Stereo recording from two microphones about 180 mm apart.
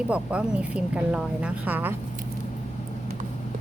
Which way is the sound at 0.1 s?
5° right (ahead or behind).